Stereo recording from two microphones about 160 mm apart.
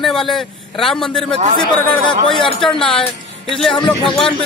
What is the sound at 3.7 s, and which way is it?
Speech, 30° left (ahead or behind).